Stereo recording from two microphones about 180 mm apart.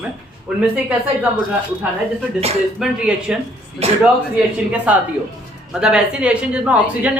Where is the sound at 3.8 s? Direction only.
35° right (ahead or behind).